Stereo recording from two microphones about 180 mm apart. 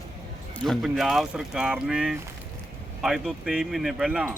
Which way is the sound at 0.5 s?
5° left (ahead or behind).